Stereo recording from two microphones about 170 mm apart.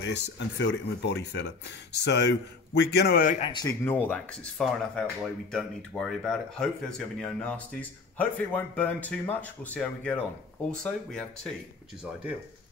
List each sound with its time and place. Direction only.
0.0 s speech: 90° left; by 3.3 s 60° left (ahead or behind)
3.3 s speech: 30° left (ahead or behind)
3.6 s speech: 10° left (ahead or behind)
12.0 s speech: 5° right (ahead or behind)